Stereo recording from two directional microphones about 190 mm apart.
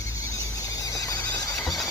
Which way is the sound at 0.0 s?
15° left (ahead or behind).